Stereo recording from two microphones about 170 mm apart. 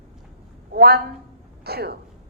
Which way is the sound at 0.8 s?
70° right (ahead or behind).